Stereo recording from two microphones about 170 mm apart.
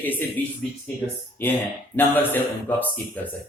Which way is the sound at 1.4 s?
10° left (ahead or behind).